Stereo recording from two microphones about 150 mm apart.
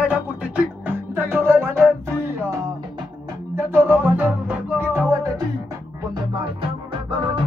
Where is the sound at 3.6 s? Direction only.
15° right (ahead or behind).